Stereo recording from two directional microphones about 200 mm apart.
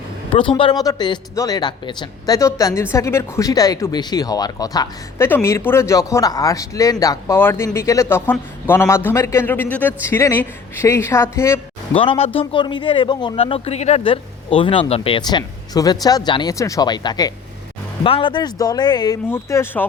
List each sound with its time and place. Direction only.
0.3 s speech: 25° left (ahead or behind)
11.9 s speech: 30° left (ahead or behind); by 19.9 s 10° left (ahead or behind)